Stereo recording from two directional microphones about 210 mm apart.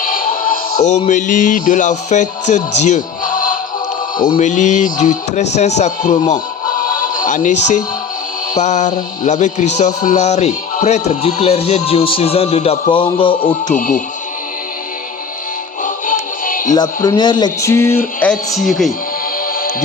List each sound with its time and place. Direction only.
0.0 s music: 40° left (ahead or behind)
4.4 s speech: 35° left (ahead or behind)
6.3 s music: 40° left (ahead or behind)
8.5 s speech: 35° left (ahead or behind)
13.7 s speech: 40° left (ahead or behind)
15.8 s music: 40° left (ahead or behind)
16.7 s speech: 20° left (ahead or behind); by 18.9 s centre (ahead or behind)